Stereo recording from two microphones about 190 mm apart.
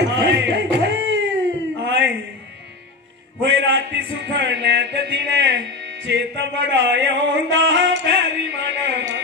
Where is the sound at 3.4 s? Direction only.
70° right (ahead or behind).